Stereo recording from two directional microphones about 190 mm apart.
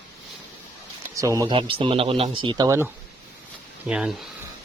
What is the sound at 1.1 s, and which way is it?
Speech, 15° right (ahead or behind).